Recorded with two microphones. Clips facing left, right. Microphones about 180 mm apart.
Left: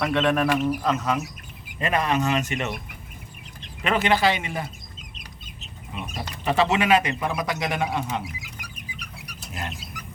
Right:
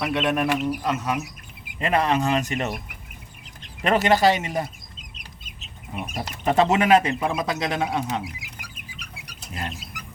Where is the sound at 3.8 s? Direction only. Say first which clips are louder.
Right 3 dB; 40° right (ahead or behind).